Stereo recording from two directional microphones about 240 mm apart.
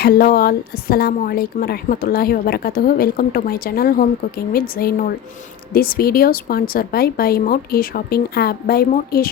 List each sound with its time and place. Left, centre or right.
0.0 s speech: left